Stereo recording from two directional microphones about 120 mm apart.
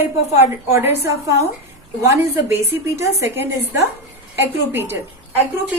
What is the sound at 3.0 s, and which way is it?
Speech, 20° right (ahead or behind).